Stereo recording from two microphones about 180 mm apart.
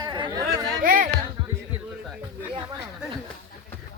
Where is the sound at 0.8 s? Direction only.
50° right (ahead or behind).